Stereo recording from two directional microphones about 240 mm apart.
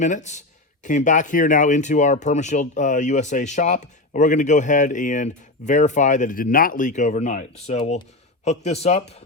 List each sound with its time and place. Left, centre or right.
0.0 s a man's voice: left